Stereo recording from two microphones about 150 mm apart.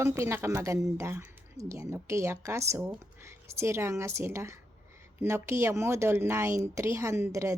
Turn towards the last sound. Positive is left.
turn(degrees=-20)  # may be behind; listen again after turning